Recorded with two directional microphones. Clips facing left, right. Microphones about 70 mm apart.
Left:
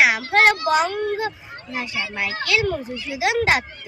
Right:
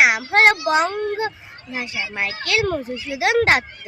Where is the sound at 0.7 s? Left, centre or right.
Right.